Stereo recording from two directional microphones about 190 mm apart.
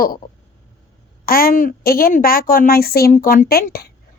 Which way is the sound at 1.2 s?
50° left (ahead or behind).